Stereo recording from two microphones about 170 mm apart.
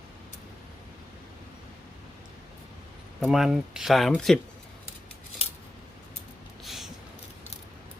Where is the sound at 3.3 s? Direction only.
Centre (ahead or behind).